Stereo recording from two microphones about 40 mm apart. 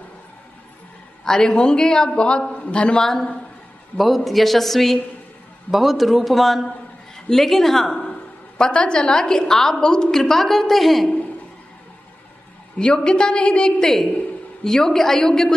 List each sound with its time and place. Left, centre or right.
1.2 s a man's voice: centre
3.9 s a woman's voice: centre
8.5 s a man's voice: left; by 11.1 s centre
12.7 s a man's voice: centre
14.6 s a woman's voice: centre